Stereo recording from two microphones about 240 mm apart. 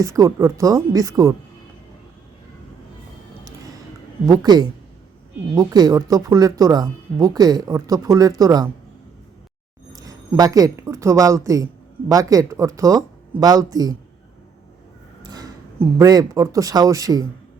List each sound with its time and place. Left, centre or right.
0.0 s speech: centre
3.4 s music: centre
4.3 s speech: centre
9.9 s speech: centre
15.2 s speech: centre